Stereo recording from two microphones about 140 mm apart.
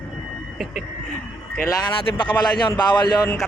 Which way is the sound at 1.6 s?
30° left (ahead or behind).